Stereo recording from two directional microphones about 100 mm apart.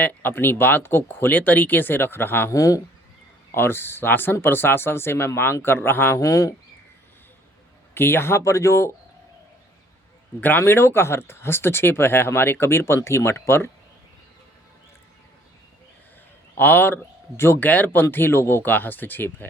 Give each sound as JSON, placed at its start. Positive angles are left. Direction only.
{"t": 0.0, "sound": "speech", "side_deg": 20}
{"t": 3.5, "sound": "speech", "side_deg": 20}
{"t": 6.1, "sound": "speech", "side_deg": 35}
{"t": 7.9, "sound": "speech", "side_deg": 25}
{"t": 10.6, "sound": "speech", "side_deg": 25}
{"t": 16.6, "sound": "speech", "side_deg": 20}